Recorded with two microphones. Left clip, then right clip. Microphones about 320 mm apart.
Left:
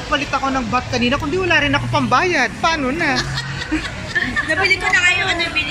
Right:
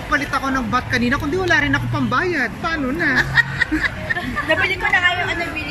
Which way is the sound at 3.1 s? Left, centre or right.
Right.